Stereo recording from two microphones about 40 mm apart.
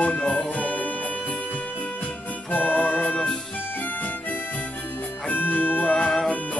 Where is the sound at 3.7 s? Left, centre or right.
Left.